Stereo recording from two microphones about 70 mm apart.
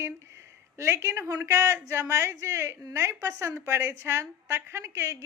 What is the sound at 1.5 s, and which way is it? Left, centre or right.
A woman's voice, right.